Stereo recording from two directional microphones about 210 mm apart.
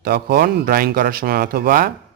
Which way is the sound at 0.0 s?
45° right (ahead or behind).